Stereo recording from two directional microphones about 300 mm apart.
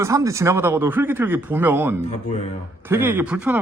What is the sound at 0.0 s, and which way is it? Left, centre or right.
Speech, centre.